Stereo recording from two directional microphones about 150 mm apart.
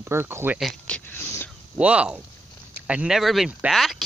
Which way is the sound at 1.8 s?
10° right (ahead or behind).